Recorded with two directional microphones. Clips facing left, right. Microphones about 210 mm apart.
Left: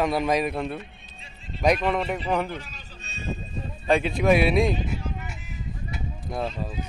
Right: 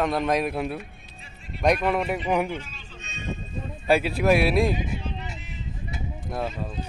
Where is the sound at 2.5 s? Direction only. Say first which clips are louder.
Right 2 dB; 35° left (ahead or behind).